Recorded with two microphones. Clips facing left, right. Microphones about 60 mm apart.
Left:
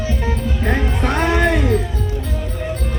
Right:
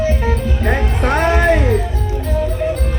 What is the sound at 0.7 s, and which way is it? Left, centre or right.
Music, right.